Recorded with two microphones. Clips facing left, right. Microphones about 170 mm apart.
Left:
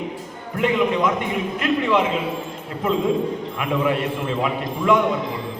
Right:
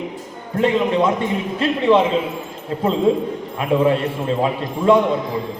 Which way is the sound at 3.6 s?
30° right (ahead or behind).